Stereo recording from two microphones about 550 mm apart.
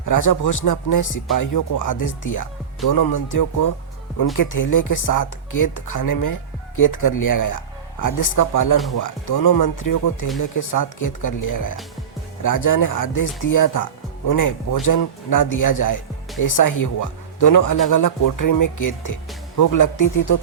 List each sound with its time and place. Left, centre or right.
0.0 s speech: left